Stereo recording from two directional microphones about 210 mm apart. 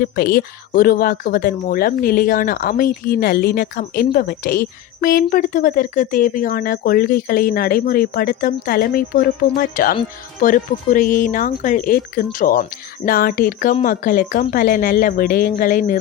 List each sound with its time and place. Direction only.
0.0 s speech: 45° left (ahead or behind)